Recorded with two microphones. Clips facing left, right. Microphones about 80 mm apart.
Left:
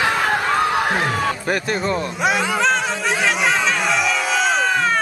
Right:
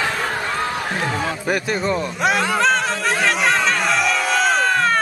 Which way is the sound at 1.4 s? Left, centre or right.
Centre.